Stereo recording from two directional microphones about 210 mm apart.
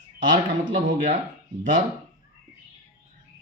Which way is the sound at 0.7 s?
35° right (ahead or behind).